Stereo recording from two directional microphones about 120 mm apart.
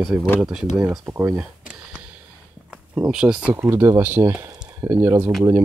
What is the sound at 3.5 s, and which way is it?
Speech, 20° right (ahead or behind).